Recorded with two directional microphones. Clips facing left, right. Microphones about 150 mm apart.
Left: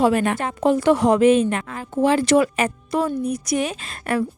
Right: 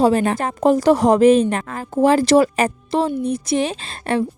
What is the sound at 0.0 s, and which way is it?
A woman's voice, 30° right (ahead or behind).